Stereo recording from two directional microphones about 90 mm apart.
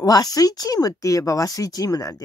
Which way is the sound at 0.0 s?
45° left (ahead or behind).